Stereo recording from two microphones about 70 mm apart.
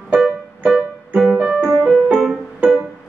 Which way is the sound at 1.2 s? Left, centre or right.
Centre.